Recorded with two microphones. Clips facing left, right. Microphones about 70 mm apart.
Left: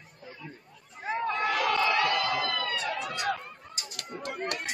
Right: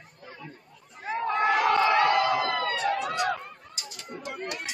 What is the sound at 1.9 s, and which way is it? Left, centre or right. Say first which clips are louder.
Crowd: right 5 dB; right.